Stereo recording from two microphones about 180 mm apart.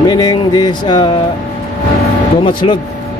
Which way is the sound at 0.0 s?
20° left (ahead or behind).